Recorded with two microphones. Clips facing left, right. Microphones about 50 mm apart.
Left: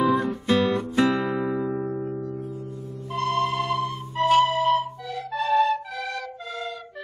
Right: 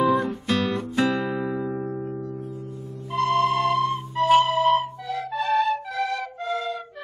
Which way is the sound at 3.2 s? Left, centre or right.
Right.